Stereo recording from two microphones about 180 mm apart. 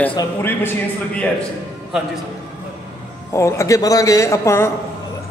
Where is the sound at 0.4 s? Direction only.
10° left (ahead or behind).